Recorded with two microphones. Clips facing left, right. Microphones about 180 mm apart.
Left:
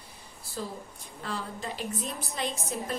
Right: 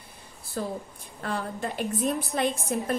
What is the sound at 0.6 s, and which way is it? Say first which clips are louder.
A woman's voice: right 5 dB; 55° right (ahead or behind).